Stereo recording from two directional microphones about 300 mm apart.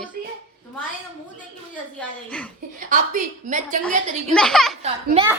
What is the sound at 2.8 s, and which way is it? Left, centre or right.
Speech, right.